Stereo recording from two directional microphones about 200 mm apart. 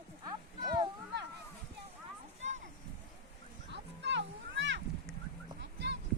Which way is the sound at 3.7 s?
60° right (ahead or behind).